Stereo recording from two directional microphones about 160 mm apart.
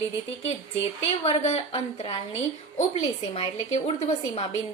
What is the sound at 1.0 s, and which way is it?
A woman's voice, 40° left (ahead or behind).